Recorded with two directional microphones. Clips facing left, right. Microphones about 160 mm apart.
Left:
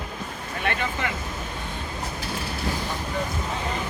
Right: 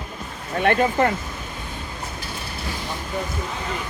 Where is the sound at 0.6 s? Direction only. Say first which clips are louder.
Right 10 dB; 50° right (ahead or behind).